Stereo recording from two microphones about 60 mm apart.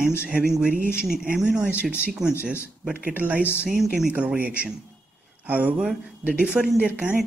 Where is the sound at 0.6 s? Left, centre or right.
Centre.